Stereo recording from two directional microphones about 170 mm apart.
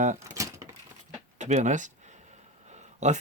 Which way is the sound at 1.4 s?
45° right (ahead or behind).